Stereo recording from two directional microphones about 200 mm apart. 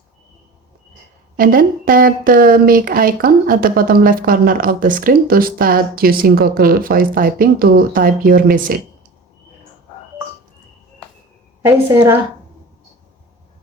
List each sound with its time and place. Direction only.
1.4 s speech: 45° right (ahead or behind)
11.6 s a woman's voice: 10° right (ahead or behind)